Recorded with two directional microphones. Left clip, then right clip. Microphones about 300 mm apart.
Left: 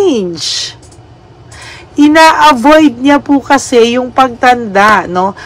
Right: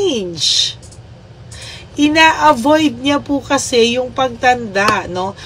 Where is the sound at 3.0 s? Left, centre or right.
Centre.